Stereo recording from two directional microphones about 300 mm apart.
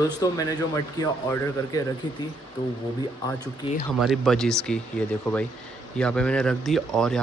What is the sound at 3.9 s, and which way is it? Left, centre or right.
Speech, centre.